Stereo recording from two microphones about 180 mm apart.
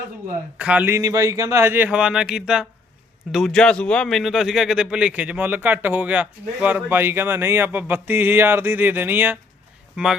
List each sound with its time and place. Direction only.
0.6 s speech: 10° right (ahead or behind)